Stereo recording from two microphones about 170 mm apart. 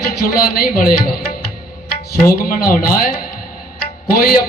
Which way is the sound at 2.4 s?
60° left (ahead or behind).